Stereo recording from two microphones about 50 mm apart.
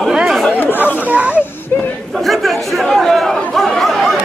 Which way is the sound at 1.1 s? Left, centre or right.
Right.